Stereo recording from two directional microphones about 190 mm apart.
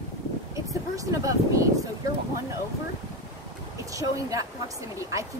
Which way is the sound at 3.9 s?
15° right (ahead or behind).